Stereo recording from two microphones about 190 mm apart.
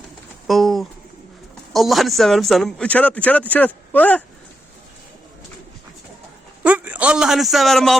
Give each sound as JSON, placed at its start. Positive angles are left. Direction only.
{"t": 0.4, "sound": "pigeon", "side_deg": 0}
{"t": 1.7, "sound": "a man's voice", "side_deg": 0}
{"t": 6.6, "sound": "a sound", "side_deg": -5}